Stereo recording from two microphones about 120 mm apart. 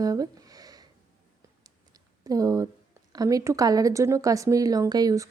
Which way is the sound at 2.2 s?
30° right (ahead or behind).